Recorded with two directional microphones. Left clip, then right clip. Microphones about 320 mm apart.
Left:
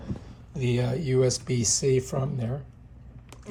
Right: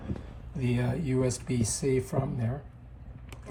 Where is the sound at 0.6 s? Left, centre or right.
Centre.